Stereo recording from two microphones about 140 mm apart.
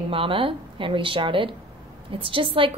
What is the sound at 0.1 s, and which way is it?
A woman's voice, 40° right (ahead or behind).